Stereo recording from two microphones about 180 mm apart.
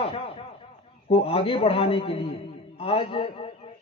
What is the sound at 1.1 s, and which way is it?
Speech, 30° left (ahead or behind).